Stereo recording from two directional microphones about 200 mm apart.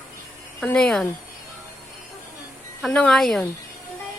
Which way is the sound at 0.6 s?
5° left (ahead or behind).